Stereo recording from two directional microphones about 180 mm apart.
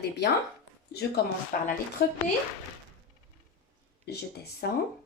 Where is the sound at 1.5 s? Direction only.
45° left (ahead or behind).